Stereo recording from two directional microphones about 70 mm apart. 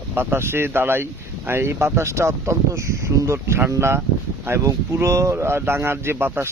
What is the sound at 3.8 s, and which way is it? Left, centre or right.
Speech, right.